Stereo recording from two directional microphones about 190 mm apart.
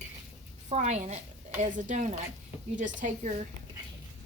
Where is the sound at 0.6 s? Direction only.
35° right (ahead or behind).